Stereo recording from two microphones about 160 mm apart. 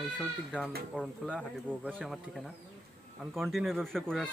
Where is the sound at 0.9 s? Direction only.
10° right (ahead or behind).